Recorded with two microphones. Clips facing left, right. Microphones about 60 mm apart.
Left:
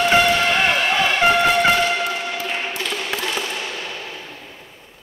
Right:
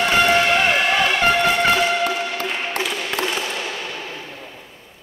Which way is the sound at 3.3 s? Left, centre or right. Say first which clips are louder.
Right 1 dB; centre.